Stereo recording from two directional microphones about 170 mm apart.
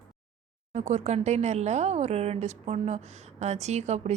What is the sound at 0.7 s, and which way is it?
A woman's voice, 40° right (ahead or behind).